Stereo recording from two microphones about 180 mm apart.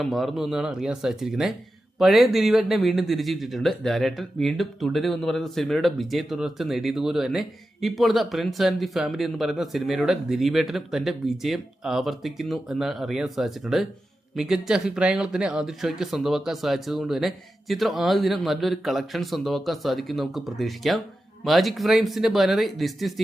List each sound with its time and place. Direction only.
0.0 s speech: centre (ahead or behind)